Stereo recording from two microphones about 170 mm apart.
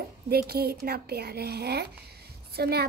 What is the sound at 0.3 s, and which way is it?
A woman's voice, 65° right (ahead or behind).